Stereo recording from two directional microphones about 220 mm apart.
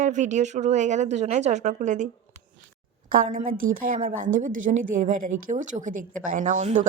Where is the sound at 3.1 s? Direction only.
35° right (ahead or behind).